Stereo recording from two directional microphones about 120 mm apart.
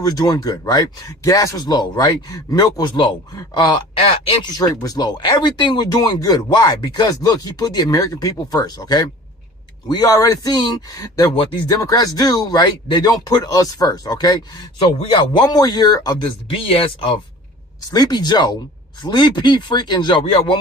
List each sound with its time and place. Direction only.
0.0 s speech: 30° left (ahead or behind)
11.3 s speech: 50° left (ahead or behind)
11.6 s speech: 30° left (ahead or behind)
14.8 s speech: 45° left (ahead or behind)
17.9 s speech: 35° left (ahead or behind)